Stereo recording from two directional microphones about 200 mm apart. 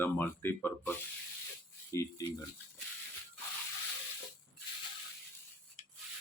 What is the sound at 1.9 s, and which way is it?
Speech, 15° left (ahead or behind).